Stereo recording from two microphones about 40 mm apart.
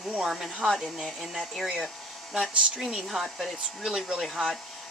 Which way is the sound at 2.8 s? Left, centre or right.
Centre.